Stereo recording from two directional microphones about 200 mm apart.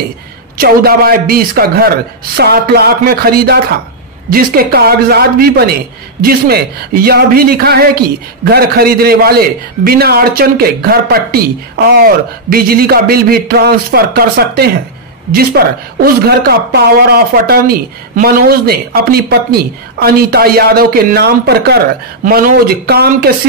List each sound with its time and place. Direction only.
0.6 s speech: 50° right (ahead or behind)